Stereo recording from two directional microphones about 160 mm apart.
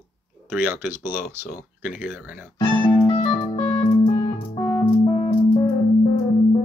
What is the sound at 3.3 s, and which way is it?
Music, 30° left (ahead or behind).